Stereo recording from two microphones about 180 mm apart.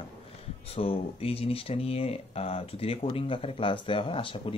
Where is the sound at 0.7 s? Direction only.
30° left (ahead or behind).